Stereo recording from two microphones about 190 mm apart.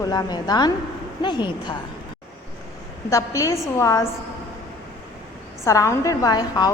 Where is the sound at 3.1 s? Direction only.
15° left (ahead or behind).